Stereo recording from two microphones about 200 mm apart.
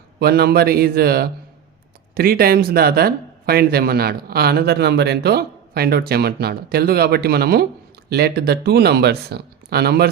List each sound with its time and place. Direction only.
0.2 s speech: 50° right (ahead or behind)